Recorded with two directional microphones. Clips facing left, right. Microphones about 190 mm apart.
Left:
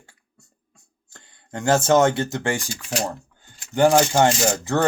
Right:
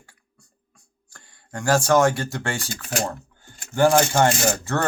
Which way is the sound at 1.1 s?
20° left (ahead or behind).